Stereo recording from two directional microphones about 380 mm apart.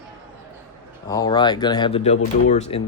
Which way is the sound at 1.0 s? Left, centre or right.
Centre.